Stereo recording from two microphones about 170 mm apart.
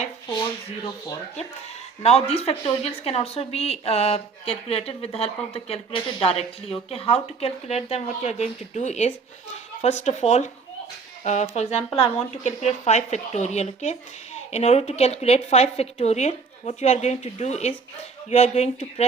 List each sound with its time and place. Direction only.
2.0 s a woman's voice: 40° left (ahead or behind)